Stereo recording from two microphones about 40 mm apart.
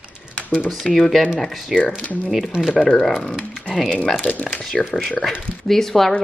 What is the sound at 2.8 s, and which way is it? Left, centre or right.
Speech, left.